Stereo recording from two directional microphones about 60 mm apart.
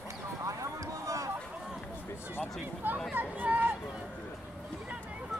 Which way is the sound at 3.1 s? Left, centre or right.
Right.